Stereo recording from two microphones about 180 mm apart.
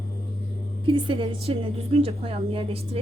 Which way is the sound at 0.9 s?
30° right (ahead or behind).